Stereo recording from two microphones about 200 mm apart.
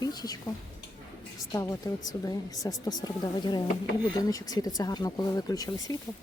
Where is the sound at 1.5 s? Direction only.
20° left (ahead or behind).